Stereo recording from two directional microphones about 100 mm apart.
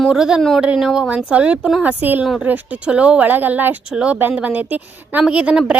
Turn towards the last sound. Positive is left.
turn(degrees=-10)  # may be behind; listen again after turning